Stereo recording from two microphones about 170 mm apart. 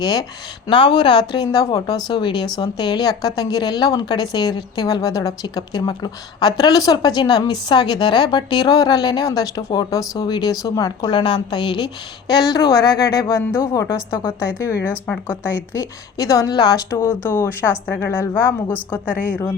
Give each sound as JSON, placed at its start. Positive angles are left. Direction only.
{"t": 0.0, "sound": "speech", "side_deg": 25}
{"t": 15.7, "sound": "speech", "side_deg": 20}
{"t": 19.0, "sound": "speech", "side_deg": -10}